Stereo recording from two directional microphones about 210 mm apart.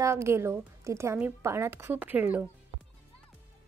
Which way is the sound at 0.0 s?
15° right (ahead or behind).